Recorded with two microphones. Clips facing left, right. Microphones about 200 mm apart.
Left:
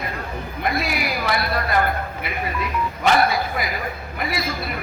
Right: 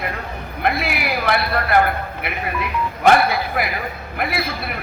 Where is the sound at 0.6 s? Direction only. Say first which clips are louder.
Right 2 dB; 60° right (ahead or behind).